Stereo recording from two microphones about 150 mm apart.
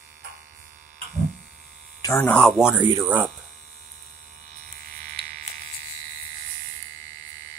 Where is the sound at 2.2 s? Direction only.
5° left (ahead or behind).